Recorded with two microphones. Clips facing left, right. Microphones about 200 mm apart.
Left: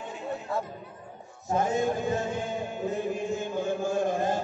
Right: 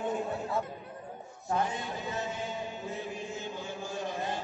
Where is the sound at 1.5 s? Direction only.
45° left (ahead or behind).